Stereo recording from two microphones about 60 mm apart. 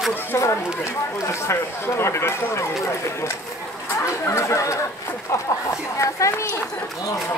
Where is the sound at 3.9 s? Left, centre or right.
Left.